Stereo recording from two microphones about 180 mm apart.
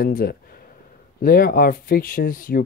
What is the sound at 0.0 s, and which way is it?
Speech, 55° left (ahead or behind).